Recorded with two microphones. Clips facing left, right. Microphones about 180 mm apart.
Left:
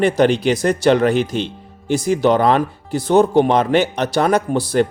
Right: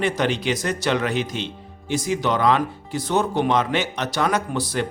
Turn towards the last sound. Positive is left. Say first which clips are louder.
# left 8 dB
turn(degrees=40)  # may be behind; listen again after turning